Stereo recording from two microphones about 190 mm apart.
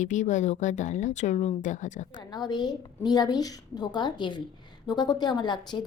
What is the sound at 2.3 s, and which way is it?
Speech, 20° left (ahead or behind).